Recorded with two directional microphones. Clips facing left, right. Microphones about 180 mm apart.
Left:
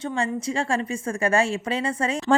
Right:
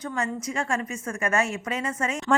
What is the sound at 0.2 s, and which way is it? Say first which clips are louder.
A woman's voice: left 3 dB; 30° left (ahead or behind).